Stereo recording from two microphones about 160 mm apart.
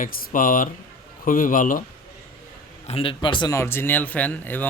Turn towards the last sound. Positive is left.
turn(degrees=10)  # may be behind; listen again after turning